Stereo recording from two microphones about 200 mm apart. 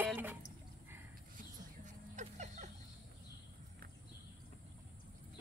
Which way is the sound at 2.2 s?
35° right (ahead or behind).